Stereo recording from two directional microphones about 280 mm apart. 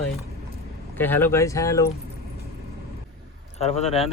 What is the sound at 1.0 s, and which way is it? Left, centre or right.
Speech, centre.